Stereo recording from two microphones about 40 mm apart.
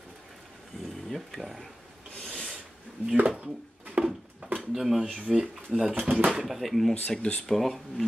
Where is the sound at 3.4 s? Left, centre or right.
Right.